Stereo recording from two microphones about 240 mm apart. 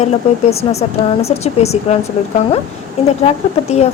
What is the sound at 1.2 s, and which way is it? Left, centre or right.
Speech, left.